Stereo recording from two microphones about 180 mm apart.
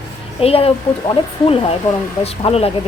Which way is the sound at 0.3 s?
35° left (ahead or behind).